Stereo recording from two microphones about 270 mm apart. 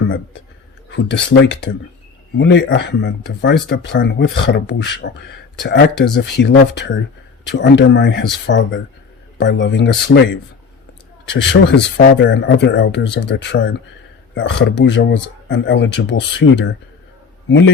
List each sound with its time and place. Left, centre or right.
0.9 s speech: left
11.3 s speech: left